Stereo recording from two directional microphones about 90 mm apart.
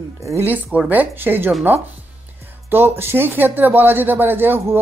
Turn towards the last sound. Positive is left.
turn(degrees=-25)  # may be behind; listen again after turning